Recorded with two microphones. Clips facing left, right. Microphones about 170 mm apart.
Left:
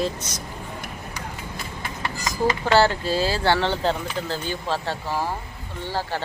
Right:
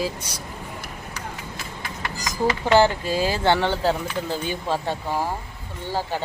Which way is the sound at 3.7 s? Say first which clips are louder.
Right 1 dB; 5° right (ahead or behind).